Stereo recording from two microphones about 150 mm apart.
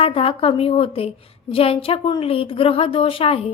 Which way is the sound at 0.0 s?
40° left (ahead or behind).